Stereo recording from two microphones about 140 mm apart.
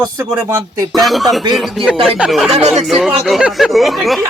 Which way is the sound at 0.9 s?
Centre (ahead or behind).